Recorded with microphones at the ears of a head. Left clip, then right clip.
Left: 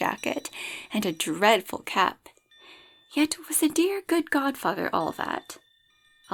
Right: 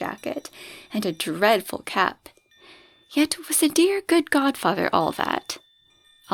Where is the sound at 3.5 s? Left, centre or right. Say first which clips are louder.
Right 7 dB; right.